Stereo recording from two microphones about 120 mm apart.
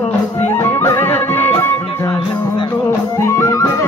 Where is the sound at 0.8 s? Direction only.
20° left (ahead or behind).